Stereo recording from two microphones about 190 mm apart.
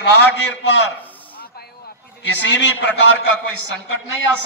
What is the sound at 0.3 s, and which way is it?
Speech, 70° left (ahead or behind).